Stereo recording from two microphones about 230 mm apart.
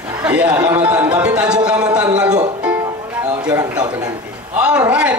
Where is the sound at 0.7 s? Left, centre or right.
Centre.